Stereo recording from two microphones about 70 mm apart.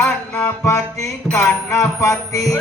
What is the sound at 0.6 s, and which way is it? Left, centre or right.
Music, left.